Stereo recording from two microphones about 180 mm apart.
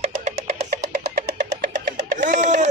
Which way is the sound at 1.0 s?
65° right (ahead or behind).